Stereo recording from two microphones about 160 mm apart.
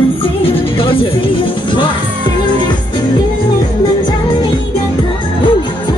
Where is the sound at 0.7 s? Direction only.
30° left (ahead or behind).